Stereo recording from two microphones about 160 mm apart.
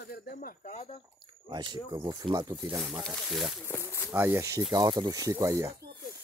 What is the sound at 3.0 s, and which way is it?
Speech, centre (ahead or behind).